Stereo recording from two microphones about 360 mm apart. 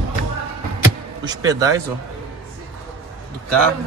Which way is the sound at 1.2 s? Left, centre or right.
Centre.